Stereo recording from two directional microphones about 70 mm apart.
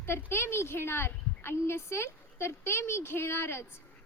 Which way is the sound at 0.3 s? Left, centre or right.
Left.